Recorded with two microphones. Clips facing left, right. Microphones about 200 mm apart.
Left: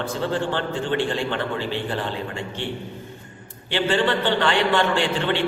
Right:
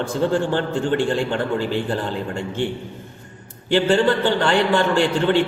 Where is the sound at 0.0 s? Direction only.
45° right (ahead or behind).